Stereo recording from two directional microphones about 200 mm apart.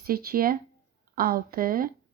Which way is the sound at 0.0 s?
50° right (ahead or behind).